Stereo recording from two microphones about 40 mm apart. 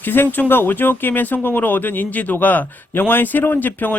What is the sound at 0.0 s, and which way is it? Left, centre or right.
Speech, left.